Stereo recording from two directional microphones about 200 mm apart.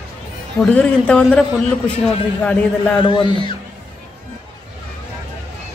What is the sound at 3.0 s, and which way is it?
Speech, 25° left (ahead or behind).